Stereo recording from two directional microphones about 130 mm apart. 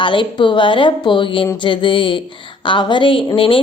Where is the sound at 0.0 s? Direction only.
40° left (ahead or behind).